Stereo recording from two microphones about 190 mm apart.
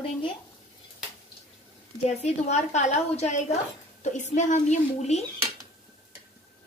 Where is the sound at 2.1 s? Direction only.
35° left (ahead or behind).